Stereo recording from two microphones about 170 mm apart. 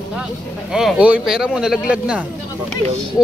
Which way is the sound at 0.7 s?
5° right (ahead or behind).